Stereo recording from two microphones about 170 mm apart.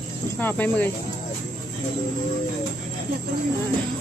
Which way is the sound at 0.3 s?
10° left (ahead or behind).